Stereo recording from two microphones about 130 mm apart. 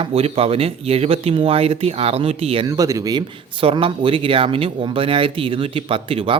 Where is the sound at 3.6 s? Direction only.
40° right (ahead or behind).